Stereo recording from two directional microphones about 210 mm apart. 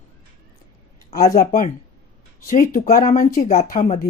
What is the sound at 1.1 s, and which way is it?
Speech, 40° left (ahead or behind).